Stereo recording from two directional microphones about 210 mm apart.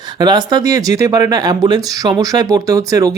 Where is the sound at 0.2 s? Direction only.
20° right (ahead or behind).